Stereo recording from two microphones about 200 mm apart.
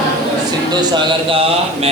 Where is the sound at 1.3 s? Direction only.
30° right (ahead or behind).